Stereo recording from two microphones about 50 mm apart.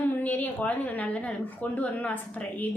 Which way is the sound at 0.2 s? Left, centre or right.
Left.